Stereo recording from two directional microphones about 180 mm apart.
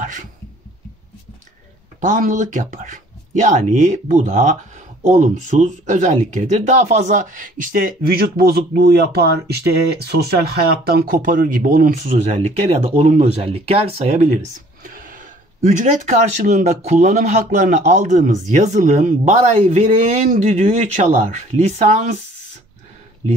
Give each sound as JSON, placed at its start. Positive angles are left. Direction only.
{"t": 0.0, "sound": "a sound", "side_deg": -45}
{"t": 2.0, "sound": "speech", "side_deg": -50}
{"t": 14.8, "sound": "speech", "side_deg": -50}